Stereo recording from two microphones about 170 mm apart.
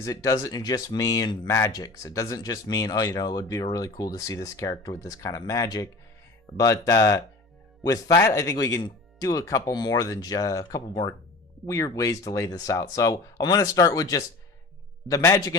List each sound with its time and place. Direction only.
0.0 s speech: 20° left (ahead or behind)